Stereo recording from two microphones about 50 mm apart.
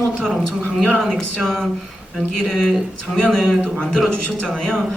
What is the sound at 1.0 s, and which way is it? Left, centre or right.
Speech, centre.